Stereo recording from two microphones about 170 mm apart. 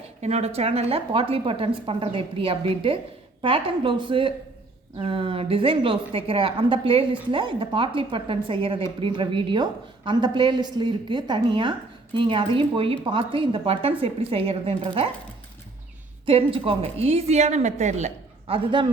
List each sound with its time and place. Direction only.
0.2 s a woman's voice: 40° right (ahead or behind)
16.2 s speech: 30° right (ahead or behind)